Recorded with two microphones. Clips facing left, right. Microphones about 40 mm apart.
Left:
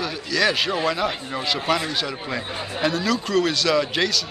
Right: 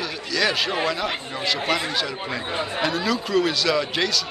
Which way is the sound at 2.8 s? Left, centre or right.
Centre.